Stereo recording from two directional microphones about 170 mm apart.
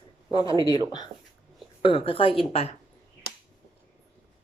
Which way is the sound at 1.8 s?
30° left (ahead or behind).